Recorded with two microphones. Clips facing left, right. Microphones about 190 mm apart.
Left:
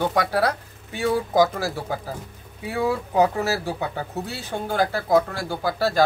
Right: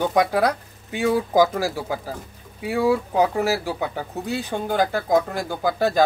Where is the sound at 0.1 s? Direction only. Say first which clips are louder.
Right 3 dB; 15° right (ahead or behind).